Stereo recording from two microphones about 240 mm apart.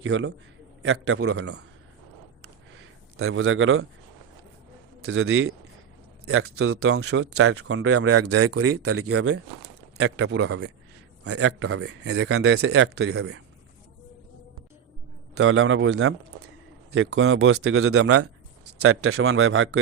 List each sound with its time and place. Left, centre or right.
0.0 s a man's voice: right
3.2 s speech: right
5.0 s a man's voice: right
11.3 s speech: right
15.4 s a man's voice: right